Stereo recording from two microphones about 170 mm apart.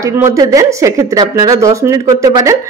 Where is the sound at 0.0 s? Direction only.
20° right (ahead or behind).